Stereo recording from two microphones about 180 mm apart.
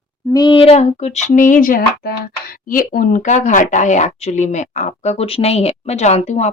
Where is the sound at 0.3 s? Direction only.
25° left (ahead or behind).